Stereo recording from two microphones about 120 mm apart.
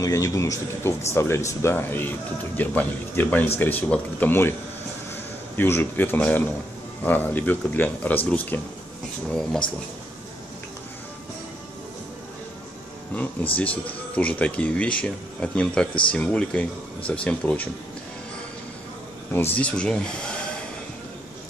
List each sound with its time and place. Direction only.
0.0 s speech: 25° left (ahead or behind)
5.6 s speech: 15° left (ahead or behind)
13.1 s speech: 15° left (ahead or behind)
19.3 s speech: 15° left (ahead or behind)